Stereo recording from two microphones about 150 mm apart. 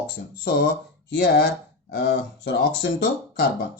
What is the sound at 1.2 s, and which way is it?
Speech, 90° left.